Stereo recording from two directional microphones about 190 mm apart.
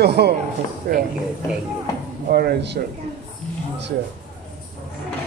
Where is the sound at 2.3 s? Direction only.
55° right (ahead or behind).